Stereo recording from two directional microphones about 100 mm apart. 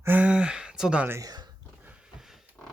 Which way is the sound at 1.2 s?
45° right (ahead or behind).